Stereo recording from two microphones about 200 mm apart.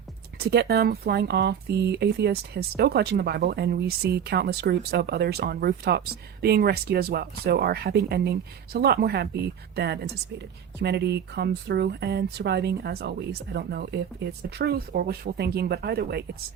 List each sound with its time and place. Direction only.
0.3 s a woman's voice: 55° right (ahead or behind)